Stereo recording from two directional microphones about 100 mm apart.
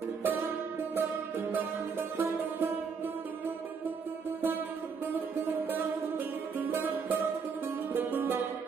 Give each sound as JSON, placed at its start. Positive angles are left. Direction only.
{"t": 1.5, "sound": "music", "side_deg": -20}
{"t": 5.7, "sound": "music", "side_deg": -20}